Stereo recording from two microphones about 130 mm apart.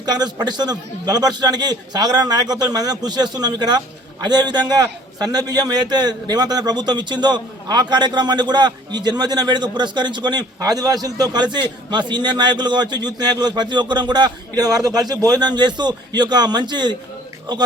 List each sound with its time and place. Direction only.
0.0 s a man's voice: 30° right (ahead or behind)